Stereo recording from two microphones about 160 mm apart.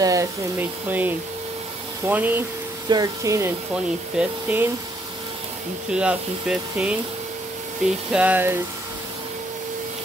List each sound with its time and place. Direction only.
0.0 s speech: 20° right (ahead or behind)
2.9 s speech: 20° right (ahead or behind)
3.7 s speech: 10° right (ahead or behind)
5.9 s speech: 5° right (ahead or behind)